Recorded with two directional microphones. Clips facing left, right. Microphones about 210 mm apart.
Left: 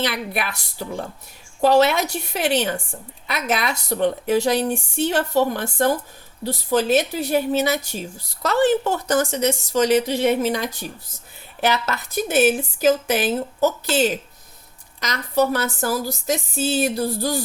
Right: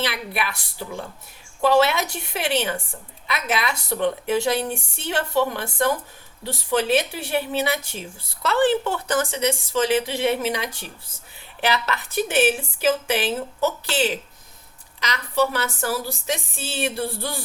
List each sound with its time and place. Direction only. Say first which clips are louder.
0.0 s a woman's voice: left 2 dB; 45° left (ahead or behind)